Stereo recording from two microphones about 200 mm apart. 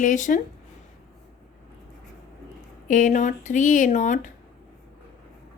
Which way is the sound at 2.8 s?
40° left (ahead or behind).